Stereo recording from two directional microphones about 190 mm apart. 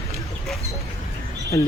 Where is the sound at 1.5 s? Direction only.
15° left (ahead or behind).